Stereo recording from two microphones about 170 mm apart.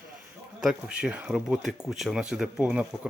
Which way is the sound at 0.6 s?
5° right (ahead or behind).